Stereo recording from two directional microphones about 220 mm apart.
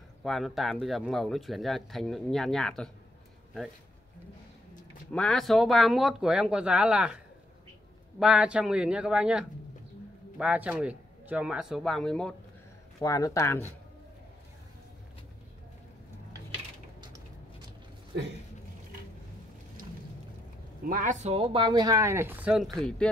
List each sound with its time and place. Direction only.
0.2 s speech: centre (ahead or behind)
5.1 s speech: centre (ahead or behind)
8.2 s speech: 5° right (ahead or behind)
13.0 s speech: 15° left (ahead or behind)
18.1 s speech: 50° right (ahead or behind)
20.9 s speech: 35° right (ahead or behind); by 23.0 s 5° left (ahead or behind)